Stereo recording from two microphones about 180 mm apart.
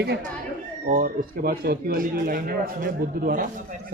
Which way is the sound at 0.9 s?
50° right (ahead or behind).